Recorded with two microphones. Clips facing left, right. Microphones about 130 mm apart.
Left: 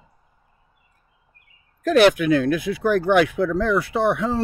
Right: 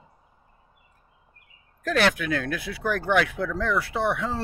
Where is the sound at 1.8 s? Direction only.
15° left (ahead or behind).